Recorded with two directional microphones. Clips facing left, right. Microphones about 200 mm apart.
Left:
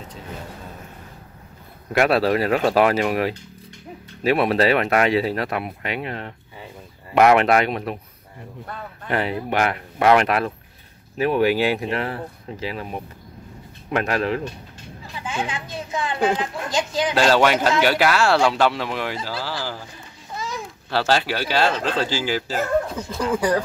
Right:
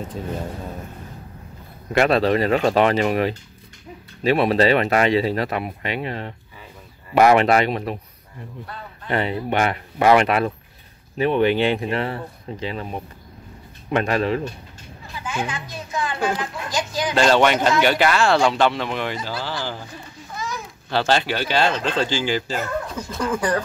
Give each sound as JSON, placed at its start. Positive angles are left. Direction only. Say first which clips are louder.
{"t": 1.9, "sound": "speech", "louder": "right 1 dB", "side_deg": 5}
{"t": 9.0, "sound": "speech", "louder": "right 1 dB", "side_deg": 5}
{"t": 15.1, "sound": "a woman's voice", "louder": "even", "side_deg": 25}
{"t": 17.1, "sound": "speech", "louder": "right 1 dB", "side_deg": 5}
{"t": 20.3, "sound": "a sound", "louder": "even", "side_deg": 25}
{"t": 20.9, "sound": "speech", "louder": "right 1 dB", "side_deg": 5}